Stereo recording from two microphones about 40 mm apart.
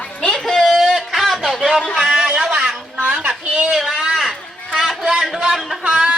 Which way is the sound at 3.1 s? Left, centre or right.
Right.